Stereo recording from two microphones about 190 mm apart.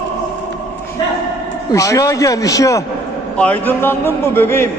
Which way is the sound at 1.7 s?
15° left (ahead or behind).